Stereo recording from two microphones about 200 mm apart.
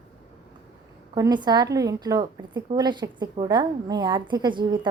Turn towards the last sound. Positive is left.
turn(degrees=-20)  # may be behind; listen again after turning